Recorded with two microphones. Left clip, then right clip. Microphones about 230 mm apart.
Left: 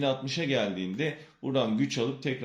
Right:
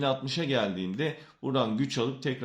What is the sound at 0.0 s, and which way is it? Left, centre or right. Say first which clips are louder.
Speech: even; right.